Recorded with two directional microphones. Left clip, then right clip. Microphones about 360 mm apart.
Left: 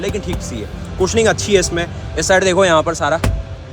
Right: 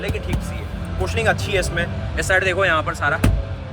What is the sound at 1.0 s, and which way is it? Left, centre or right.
Speech, centre.